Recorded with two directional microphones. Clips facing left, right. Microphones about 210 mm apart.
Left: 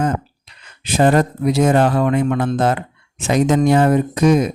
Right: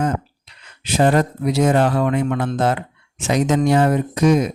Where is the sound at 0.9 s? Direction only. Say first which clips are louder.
Left 2 dB; 50° left (ahead or behind).